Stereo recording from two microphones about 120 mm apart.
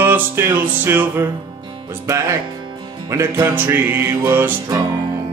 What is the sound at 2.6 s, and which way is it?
Music, 40° right (ahead or behind).